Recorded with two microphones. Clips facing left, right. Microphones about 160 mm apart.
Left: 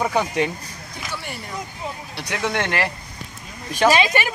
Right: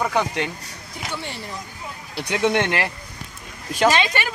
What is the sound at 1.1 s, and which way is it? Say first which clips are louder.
Vehicle: right 1 dB; 25° right (ahead or behind).